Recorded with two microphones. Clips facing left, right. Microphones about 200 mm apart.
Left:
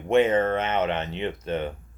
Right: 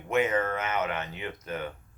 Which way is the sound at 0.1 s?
30° left (ahead or behind).